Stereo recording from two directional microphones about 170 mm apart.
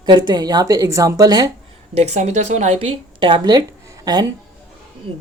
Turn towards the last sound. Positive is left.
turn(degrees=-25)  # may be behind; listen again after turning